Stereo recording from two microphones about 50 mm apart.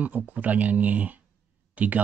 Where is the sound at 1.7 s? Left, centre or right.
Right.